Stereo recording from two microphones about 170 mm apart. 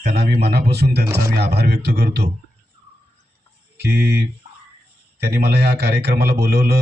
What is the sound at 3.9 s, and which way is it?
Speech, 15° right (ahead or behind).